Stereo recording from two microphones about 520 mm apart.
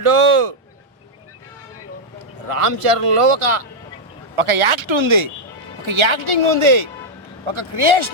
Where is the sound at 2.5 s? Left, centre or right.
Right.